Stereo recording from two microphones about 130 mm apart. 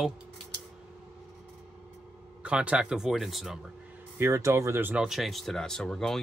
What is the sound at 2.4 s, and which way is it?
Speech, 10° right (ahead or behind).